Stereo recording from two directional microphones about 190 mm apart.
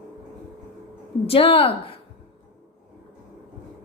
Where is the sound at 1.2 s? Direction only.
30° left (ahead or behind).